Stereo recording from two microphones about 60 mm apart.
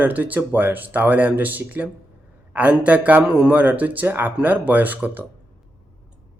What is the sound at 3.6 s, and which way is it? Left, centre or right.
Speech, right.